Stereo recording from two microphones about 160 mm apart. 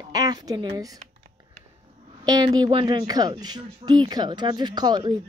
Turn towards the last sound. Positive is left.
turn(degrees=-25)  # may be behind; listen again after turning